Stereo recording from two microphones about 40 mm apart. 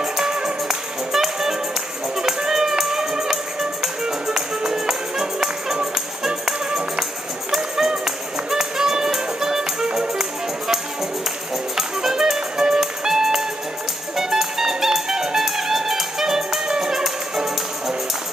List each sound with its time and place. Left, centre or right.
0.0 s music: centre
11.7 s music: centre
16.6 s music: centre